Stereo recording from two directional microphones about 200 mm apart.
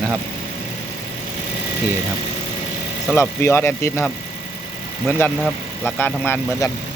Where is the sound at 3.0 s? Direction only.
10° left (ahead or behind).